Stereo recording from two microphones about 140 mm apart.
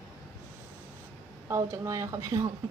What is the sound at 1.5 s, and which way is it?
Speech, 20° right (ahead or behind).